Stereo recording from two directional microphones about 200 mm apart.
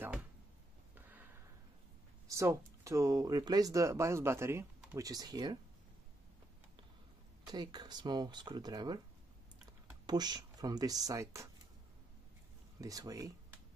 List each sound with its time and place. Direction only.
0.9 s a sound: 10° right (ahead or behind)
2.2 s speech: 15° right (ahead or behind)
7.4 s speech: 20° right (ahead or behind)
10.0 s speech: 20° right (ahead or behind)
12.8 s speech: 15° right (ahead or behind)